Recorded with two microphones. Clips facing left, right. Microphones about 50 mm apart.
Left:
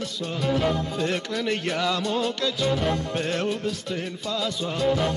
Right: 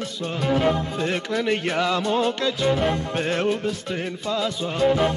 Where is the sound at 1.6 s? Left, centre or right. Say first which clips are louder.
Right 3 dB; centre.